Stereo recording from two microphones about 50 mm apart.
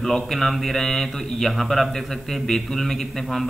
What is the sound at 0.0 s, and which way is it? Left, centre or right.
Speech, centre.